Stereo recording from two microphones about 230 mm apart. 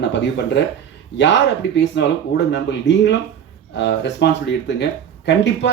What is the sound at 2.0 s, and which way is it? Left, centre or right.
Speech, left.